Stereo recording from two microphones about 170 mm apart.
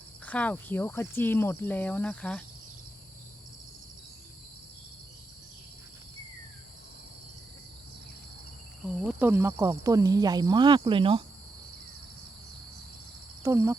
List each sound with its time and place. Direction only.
0.3 s speech: 10° left (ahead or behind)
9.0 s speech: 10° right (ahead or behind); by 11.2 s 30° right (ahead or behind)
13.4 s speech: 15° right (ahead or behind)